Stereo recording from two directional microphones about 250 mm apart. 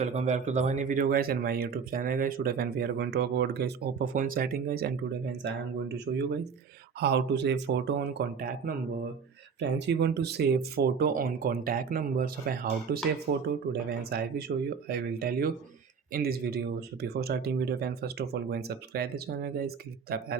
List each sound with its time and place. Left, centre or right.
0.0 s speech: right